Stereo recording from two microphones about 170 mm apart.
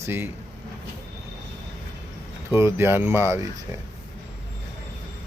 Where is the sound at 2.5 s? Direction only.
15° right (ahead or behind).